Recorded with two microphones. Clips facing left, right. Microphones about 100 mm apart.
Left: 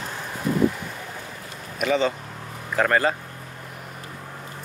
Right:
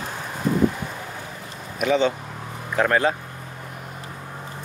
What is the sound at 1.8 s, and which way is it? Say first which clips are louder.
Speech: right 2 dB; centre (ahead or behind).